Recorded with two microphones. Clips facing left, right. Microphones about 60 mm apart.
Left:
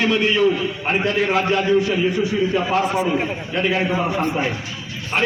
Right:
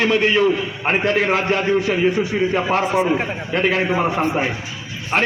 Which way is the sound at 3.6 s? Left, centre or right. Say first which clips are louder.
Right 2 dB; right.